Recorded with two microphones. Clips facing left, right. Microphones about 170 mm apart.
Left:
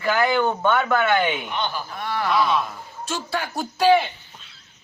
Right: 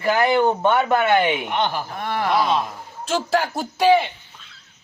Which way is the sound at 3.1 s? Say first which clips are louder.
Right 7 dB; 90° right.